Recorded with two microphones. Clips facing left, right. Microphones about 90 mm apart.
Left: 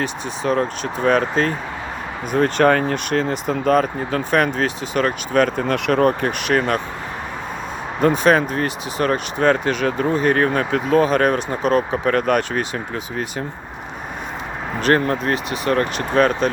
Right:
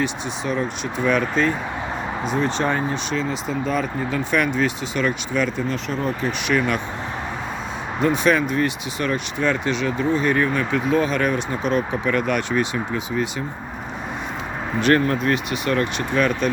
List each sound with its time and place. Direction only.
0.4 s speech: 55° left (ahead or behind)
0.9 s speech: 40° left (ahead or behind)
2.2 s speech: 55° left (ahead or behind)
5.6 s speech: 70° left (ahead or behind)
6.5 s speech: 45° left (ahead or behind)
8.0 s speech: 40° left (ahead or behind)
14.8 s speech: 40° left (ahead or behind)